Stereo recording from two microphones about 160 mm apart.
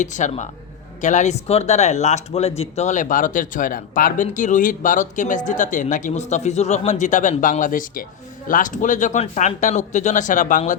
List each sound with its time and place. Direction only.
0.0 s speech: 50° left (ahead or behind)